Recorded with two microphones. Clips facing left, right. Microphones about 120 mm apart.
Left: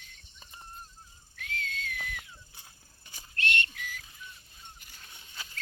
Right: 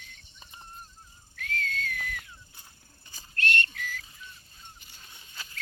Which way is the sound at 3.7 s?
10° left (ahead or behind).